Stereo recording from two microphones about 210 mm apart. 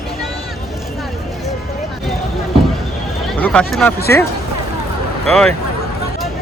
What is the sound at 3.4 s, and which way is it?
Speech, 5° left (ahead or behind).